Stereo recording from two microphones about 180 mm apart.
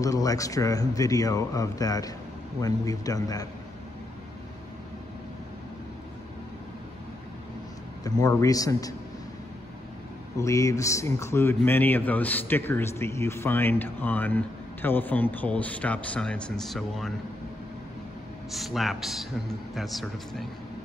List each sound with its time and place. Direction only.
0.0 s speech: 20° left (ahead or behind)
8.0 s speech: 20° left (ahead or behind)
10.4 s speech: 20° left (ahead or behind); by 17.1 s centre (ahead or behind)
18.5 s speech: centre (ahead or behind)